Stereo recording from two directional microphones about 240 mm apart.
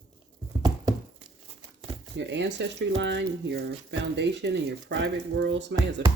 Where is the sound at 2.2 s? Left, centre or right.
Right.